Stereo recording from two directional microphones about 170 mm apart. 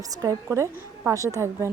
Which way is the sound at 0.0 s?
20° right (ahead or behind).